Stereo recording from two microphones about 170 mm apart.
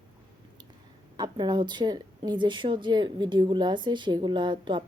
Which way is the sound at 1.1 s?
25° right (ahead or behind).